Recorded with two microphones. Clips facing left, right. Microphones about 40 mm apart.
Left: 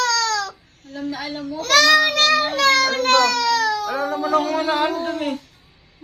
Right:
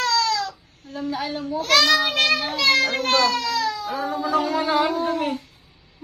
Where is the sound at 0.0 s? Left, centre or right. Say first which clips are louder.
Left 1 dB; left.